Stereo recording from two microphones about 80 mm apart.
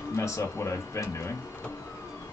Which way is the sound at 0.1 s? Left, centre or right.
Left.